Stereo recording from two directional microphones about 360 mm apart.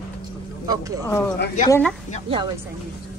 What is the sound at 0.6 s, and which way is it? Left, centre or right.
Speech, centre.